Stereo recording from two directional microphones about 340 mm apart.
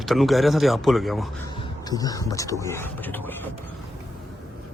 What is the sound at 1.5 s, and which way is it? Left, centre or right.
Speech, centre.